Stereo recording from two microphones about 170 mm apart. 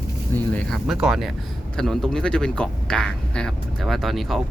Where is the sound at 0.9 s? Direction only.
Centre (ahead or behind).